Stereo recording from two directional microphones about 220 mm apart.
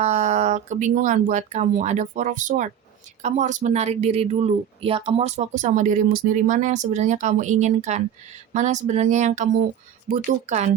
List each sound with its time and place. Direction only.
0.0 s speech: 30° right (ahead or behind)